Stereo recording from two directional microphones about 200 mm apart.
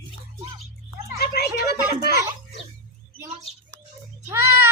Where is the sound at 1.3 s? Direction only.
55° left (ahead or behind).